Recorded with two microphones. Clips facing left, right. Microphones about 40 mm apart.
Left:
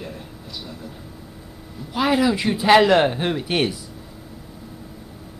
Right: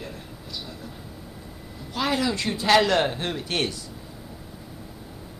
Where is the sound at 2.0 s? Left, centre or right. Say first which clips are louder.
Left 6 dB; centre.